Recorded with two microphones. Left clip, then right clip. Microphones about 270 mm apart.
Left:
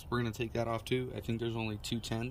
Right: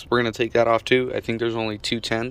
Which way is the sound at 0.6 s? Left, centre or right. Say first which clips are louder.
Right 16 dB; centre.